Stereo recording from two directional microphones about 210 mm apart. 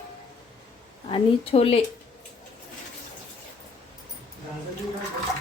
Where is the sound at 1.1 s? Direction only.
25° left (ahead or behind).